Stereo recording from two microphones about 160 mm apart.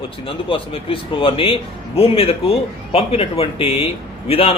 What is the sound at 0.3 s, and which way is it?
A man's voice, 35° left (ahead or behind).